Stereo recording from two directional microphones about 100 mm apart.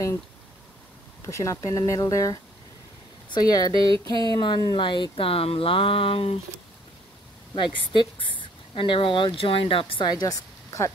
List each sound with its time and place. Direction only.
1.2 s speech: 30° left (ahead or behind); by 6.4 s 70° left (ahead or behind)
7.5 s speech: 55° left (ahead or behind); by 10.9 s 35° left (ahead or behind)